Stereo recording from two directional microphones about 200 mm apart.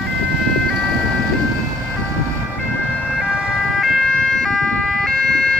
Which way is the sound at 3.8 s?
5° left (ahead or behind).